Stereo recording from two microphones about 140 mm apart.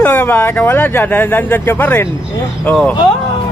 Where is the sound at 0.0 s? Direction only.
10° left (ahead or behind).